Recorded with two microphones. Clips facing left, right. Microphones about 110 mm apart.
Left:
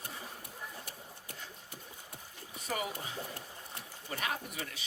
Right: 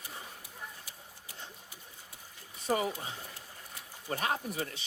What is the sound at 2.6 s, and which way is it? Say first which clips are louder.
Speech: right 6 dB; 30° right (ahead or behind).